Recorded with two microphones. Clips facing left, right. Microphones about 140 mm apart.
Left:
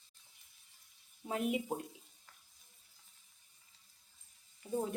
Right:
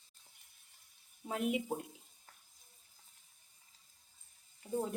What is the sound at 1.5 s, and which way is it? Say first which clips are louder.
Speech: even; centre (ahead or behind).